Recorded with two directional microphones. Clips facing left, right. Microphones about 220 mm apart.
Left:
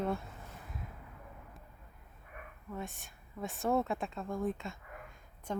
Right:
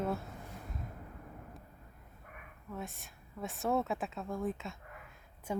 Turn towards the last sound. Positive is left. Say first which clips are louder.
# right 1 dB
turn(degrees=-10)  # may be behind; listen again after turning